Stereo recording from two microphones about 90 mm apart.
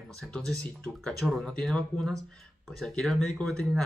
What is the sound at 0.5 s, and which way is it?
Speech, 10° left (ahead or behind).